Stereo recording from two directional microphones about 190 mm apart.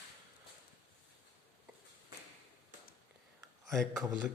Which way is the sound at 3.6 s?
Centre (ahead or behind).